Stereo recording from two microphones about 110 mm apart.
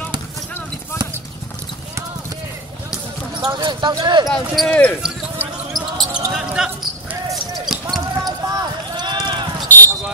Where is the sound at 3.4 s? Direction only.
40° right (ahead or behind).